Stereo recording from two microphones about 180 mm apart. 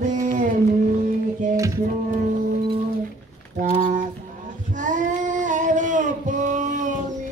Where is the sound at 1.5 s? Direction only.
20° right (ahead or behind).